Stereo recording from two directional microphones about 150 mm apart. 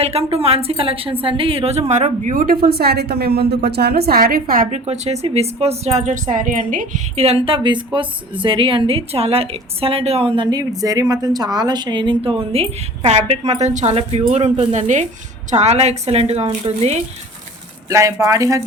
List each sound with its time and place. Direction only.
0.0 s a woman's voice: 45° right (ahead or behind); by 4.8 s 70° right (ahead or behind)
4.9 s a woman's voice: 45° right (ahead or behind); by 7.0 s 65° right (ahead or behind)
7.2 s a woman's voice: 40° right (ahead or behind)
17.8 s speech: 20° right (ahead or behind)